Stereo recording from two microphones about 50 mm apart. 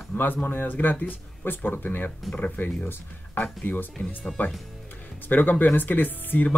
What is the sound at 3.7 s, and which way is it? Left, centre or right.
Speech, left.